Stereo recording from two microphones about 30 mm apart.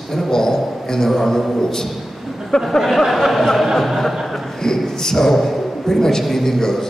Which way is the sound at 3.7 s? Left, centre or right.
Centre.